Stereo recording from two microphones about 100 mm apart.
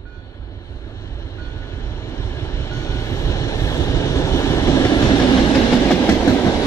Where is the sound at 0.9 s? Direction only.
30° left (ahead or behind).